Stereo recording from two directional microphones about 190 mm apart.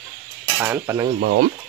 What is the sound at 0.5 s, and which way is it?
Cutlery, 15° right (ahead or behind).